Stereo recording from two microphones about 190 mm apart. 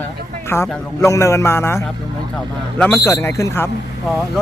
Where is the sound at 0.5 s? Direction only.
15° left (ahead or behind).